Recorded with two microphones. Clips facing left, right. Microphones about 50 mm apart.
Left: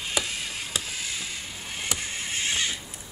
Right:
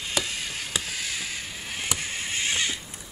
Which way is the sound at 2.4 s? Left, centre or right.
Right.